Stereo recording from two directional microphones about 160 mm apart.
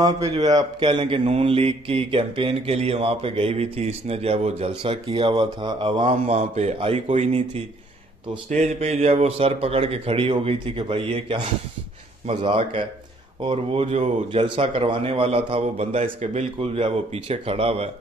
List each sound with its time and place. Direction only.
0.0 s speech: 25° right (ahead or behind)